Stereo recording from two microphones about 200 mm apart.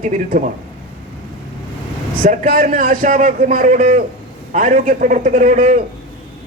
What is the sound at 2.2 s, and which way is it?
A man's voice, 45° right (ahead or behind).